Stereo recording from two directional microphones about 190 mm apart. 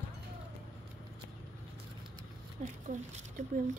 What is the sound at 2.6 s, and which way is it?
Speech, 45° right (ahead or behind).